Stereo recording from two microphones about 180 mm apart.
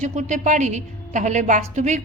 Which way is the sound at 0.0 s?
40° right (ahead or behind).